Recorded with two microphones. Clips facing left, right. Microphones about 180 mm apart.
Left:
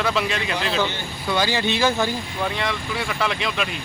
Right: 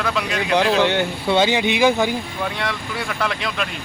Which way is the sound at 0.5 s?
80° right.